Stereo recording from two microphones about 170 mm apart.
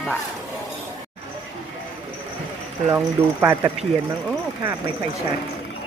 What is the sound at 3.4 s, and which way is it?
Speech, 20° right (ahead or behind).